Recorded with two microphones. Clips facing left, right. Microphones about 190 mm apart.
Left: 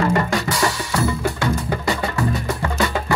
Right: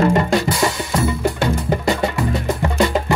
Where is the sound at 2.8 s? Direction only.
25° right (ahead or behind).